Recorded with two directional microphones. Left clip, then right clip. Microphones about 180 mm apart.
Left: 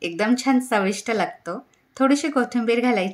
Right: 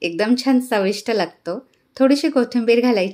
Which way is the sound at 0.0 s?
20° right (ahead or behind).